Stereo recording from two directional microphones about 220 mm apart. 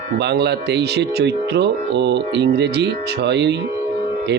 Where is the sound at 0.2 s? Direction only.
50° right (ahead or behind).